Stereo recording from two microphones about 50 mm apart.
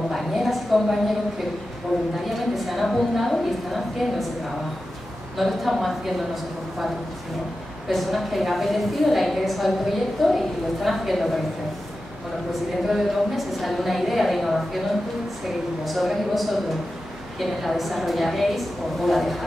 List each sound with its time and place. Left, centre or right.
0.1 s a sound: centre
2.2 s a woman's voice: centre
5.4 s a woman's voice: centre
7.9 s a woman's voice: centre
12.8 s a woman's voice: centre
15.8 s a woman's voice: centre